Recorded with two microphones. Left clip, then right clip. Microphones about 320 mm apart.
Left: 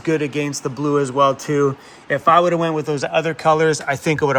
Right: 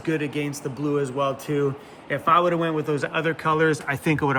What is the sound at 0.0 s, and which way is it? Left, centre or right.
Speech, left.